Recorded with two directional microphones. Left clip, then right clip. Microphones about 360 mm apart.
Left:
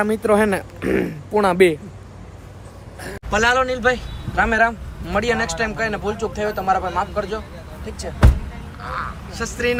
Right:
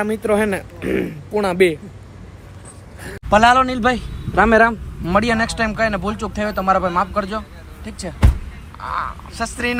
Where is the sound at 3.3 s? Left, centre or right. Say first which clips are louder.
Right 5 dB; centre.